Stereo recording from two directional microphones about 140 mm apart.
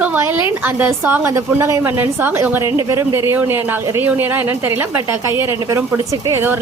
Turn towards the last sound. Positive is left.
turn(degrees=-15)  # may be behind; listen again after turning